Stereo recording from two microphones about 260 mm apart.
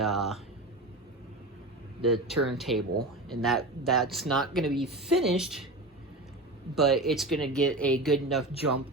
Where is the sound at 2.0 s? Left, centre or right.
Centre.